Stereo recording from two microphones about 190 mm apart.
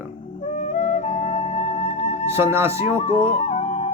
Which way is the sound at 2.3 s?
15° right (ahead or behind).